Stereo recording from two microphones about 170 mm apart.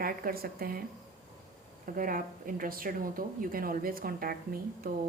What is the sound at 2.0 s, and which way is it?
A woman's voice, 55° right (ahead or behind).